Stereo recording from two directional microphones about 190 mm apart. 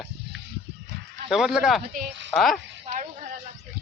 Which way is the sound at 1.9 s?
40° right (ahead or behind).